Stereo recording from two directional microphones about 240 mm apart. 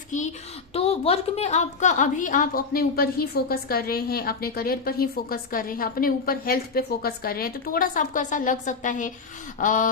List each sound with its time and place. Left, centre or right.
0.7 s a woman's voice: left